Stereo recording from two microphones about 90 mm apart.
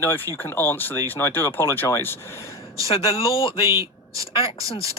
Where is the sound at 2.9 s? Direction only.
90° left.